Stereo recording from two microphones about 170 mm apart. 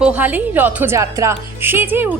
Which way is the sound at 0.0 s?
10° right (ahead or behind).